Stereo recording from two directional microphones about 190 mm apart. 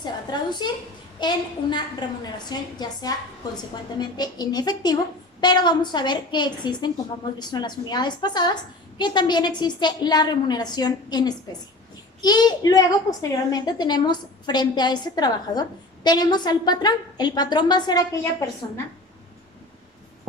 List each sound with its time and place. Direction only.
0.0 s a woman's voice: 20° left (ahead or behind)